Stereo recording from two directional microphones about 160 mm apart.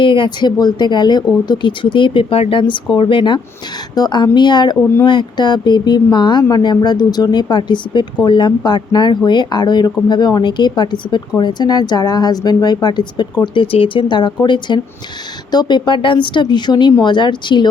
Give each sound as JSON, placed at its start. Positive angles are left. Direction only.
{"t": 0.0, "sound": "speech", "side_deg": 30}